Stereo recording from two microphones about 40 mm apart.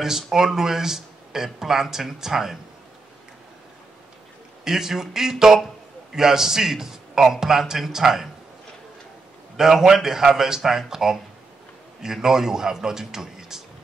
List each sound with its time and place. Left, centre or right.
0.0 s speech: centre
4.6 s speech: centre
9.6 s speech: centre